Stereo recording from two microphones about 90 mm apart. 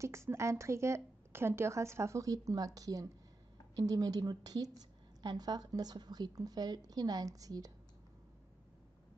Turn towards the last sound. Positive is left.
turn(degrees=-45)  # may be behind; listen again after turning